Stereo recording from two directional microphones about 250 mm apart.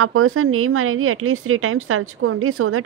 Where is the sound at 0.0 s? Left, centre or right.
Right.